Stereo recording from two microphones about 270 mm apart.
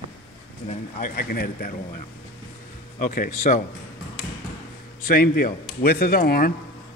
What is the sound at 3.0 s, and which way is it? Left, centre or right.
Speech, left.